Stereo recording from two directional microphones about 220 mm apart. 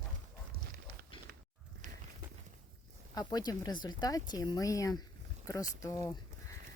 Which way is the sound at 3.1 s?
15° left (ahead or behind).